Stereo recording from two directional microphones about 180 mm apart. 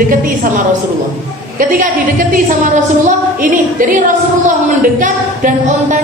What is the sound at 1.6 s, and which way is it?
A woman's voice, 50° right (ahead or behind).